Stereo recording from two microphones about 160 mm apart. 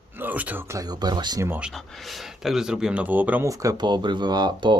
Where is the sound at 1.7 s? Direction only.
Centre (ahead or behind).